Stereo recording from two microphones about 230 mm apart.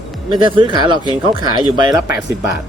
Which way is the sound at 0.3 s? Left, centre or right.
Right.